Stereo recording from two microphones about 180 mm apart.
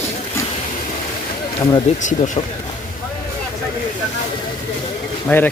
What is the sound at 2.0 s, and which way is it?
Speech, 45° left (ahead or behind).